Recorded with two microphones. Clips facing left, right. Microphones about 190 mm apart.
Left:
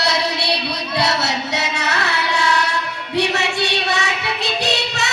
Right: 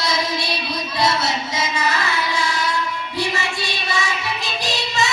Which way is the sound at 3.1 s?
70° left (ahead or behind).